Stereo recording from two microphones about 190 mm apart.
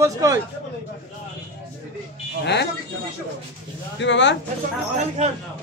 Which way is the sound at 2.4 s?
65° left (ahead or behind).